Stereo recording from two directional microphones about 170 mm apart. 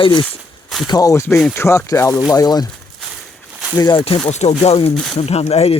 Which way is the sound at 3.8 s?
30° left (ahead or behind).